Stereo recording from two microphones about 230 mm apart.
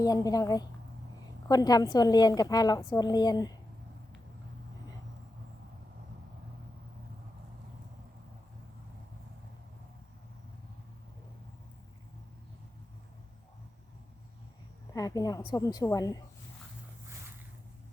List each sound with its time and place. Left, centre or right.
0.0 s a woman's voice: centre
14.9 s a woman's voice: centre